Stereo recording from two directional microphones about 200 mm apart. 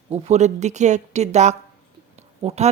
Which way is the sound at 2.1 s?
30° right (ahead or behind).